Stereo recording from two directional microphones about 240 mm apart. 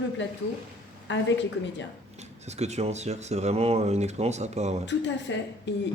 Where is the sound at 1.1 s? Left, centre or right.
Left.